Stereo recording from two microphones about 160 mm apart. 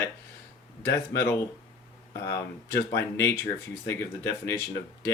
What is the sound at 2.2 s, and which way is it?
Speech, 20° left (ahead or behind).